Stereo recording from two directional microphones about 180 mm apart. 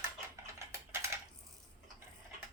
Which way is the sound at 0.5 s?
15° right (ahead or behind).